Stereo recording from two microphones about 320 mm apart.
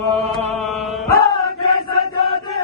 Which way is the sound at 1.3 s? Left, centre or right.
Centre.